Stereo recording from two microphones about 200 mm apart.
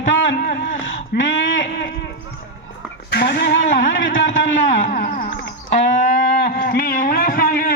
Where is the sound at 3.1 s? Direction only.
55° left (ahead or behind).